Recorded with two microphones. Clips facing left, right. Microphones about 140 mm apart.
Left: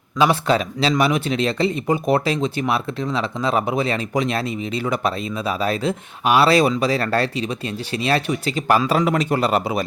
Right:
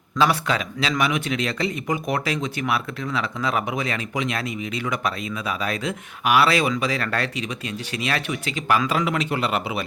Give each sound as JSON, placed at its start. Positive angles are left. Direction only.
{"t": 0.4, "sound": "speech", "side_deg": 35}